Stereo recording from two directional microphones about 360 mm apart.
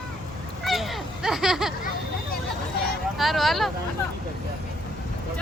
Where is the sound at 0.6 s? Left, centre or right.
Centre.